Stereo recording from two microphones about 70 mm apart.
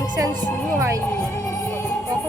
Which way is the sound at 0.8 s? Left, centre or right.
Right.